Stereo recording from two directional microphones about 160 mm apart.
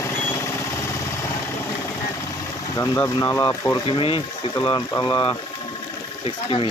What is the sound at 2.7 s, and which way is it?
Speech, 20° left (ahead or behind).